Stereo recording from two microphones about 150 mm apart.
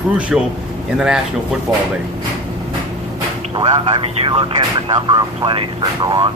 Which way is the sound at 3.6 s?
30° right (ahead or behind).